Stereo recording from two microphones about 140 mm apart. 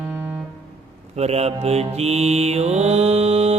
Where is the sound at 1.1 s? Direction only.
50° right (ahead or behind).